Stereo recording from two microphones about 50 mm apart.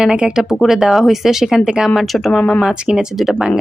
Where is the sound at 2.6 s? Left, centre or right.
Centre.